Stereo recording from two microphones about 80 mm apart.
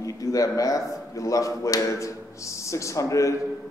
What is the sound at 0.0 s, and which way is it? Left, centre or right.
Speech, left.